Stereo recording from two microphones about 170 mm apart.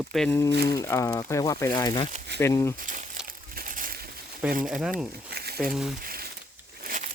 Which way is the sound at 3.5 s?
50° right (ahead or behind).